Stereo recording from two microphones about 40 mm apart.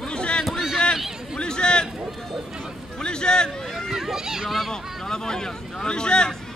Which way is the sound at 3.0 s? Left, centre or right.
Left.